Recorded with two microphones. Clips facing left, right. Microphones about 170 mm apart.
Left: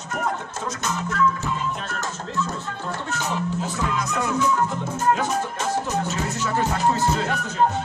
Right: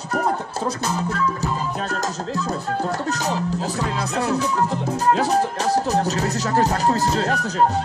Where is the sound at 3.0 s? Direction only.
40° right (ahead or behind).